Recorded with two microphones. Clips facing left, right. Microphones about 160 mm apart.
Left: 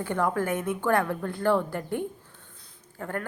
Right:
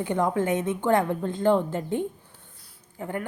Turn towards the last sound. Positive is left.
turn(degrees=-15)  # may be behind; listen again after turning